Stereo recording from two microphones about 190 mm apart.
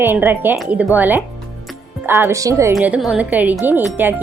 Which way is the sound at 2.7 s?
5° right (ahead or behind).